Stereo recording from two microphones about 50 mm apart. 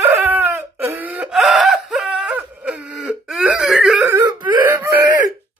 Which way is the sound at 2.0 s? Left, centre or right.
Right.